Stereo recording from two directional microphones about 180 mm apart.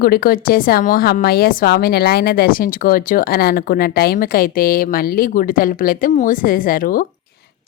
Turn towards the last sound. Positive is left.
turn(degrees=50)  # may be behind; listen again after turning